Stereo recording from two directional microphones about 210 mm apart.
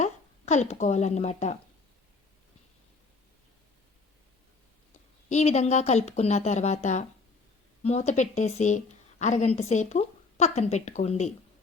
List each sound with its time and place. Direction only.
0.0 s speech: 35° left (ahead or behind)
5.3 s a woman's voice: 30° left (ahead or behind)